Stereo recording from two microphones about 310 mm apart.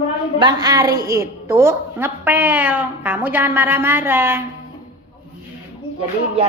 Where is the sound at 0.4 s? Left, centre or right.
Centre.